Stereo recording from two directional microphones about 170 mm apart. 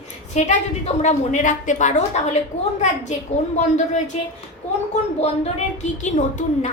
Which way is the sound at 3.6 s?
45° left (ahead or behind).